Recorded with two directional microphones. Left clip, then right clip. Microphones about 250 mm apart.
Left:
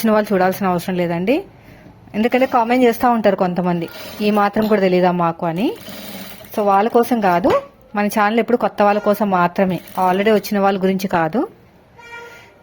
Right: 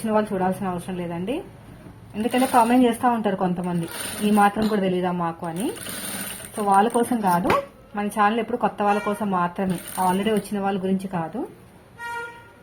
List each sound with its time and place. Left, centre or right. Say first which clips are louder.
0.0 s speech: left 7 dB; left